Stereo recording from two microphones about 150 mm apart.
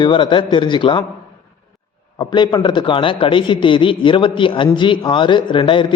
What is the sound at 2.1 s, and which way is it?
A man's voice, 25° left (ahead or behind).